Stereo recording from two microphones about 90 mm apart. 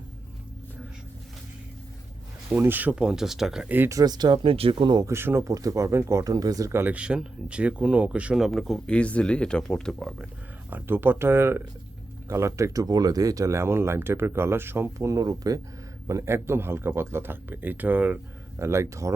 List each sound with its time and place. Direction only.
2.5 s speech: 20° right (ahead or behind)
2.9 s speech: 10° right (ahead or behind)
3.8 s speech: 45° right (ahead or behind)
4.4 s speech: 90° right
5.0 s speech: 25° right (ahead or behind)
5.5 s speech: 40° right (ahead or behind)
6.7 s speech: 25° right (ahead or behind)
6.9 s speech: 10° right (ahead or behind)
8.4 s speech: centre (ahead or behind)
10.7 s speech: 20° right (ahead or behind); by 15.6 s 45° right (ahead or behind)
16.0 s speech: 35° right (ahead or behind)
18.6 s speech: 30° right (ahead or behind)